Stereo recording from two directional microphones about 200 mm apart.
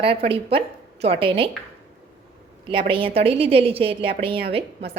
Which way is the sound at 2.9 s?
25° right (ahead or behind).